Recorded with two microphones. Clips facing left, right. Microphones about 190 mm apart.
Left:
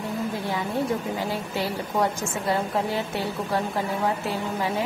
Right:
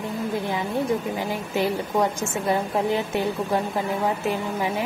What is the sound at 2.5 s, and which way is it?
Speech, 15° right (ahead or behind).